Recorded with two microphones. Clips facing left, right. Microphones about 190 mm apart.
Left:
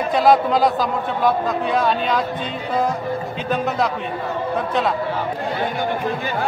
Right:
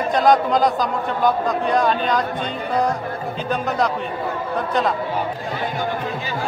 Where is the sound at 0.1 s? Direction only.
5° left (ahead or behind).